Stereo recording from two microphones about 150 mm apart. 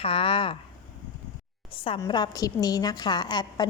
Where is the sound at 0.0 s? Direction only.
35° left (ahead or behind).